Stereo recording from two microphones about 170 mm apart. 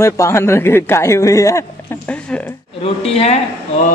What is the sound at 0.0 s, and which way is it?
Speech, 15° left (ahead or behind).